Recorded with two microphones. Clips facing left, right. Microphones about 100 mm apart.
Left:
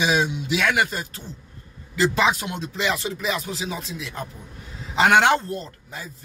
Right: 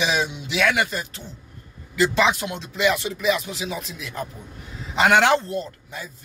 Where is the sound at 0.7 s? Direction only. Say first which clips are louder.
Even; 40° left (ahead or behind).